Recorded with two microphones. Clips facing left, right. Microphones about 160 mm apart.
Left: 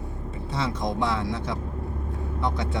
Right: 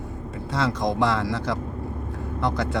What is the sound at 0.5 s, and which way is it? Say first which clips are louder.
Speech: right 4 dB; 90° right.